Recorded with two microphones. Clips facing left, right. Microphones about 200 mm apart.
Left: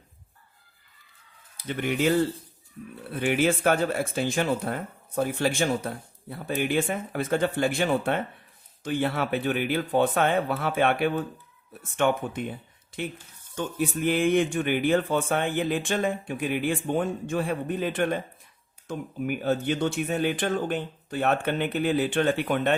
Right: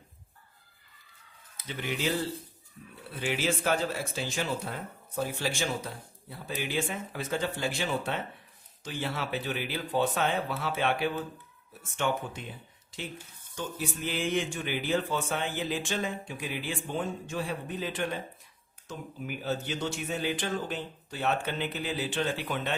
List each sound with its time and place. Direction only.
1.6 s speech: 55° left (ahead or behind)
13.6 s speech: 55° left (ahead or behind)